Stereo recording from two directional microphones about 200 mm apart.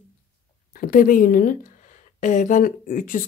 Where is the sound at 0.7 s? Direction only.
45° left (ahead or behind).